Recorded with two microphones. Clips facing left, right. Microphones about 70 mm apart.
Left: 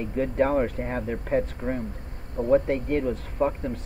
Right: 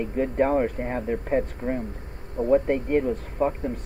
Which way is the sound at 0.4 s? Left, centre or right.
Centre.